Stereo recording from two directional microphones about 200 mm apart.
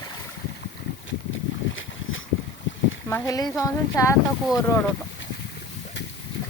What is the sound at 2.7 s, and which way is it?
Boat, 65° left (ahead or behind).